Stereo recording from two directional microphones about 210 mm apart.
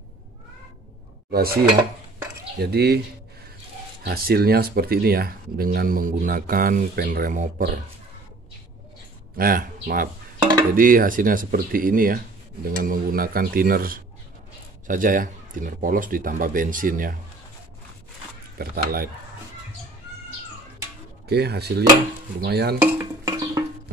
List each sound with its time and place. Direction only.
1.3 s speech: 45° right (ahead or behind)
4.0 s speech: 45° right (ahead or behind)
9.4 s speech: 45° right (ahead or behind)
18.6 s speech: 45° right (ahead or behind)
21.3 s speech: 50° right (ahead or behind)
22.8 s music: 15° right (ahead or behind)